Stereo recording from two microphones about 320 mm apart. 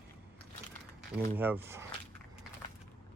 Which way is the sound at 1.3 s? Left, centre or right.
Centre.